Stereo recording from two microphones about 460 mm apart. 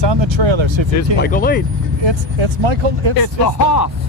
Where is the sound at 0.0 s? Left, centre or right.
Right.